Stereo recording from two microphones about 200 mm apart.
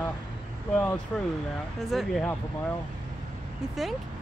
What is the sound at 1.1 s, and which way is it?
Speech, 10° left (ahead or behind).